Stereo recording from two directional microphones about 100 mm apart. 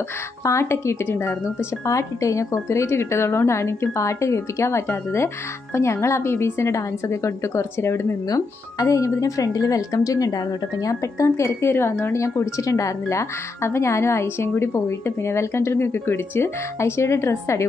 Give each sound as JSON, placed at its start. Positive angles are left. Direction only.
{"t": 0.4, "sound": "speech", "side_deg": 30}